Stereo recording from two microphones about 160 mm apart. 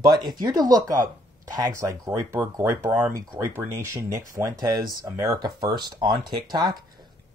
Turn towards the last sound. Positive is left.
turn(degrees=-25)  # may be behind; listen again after turning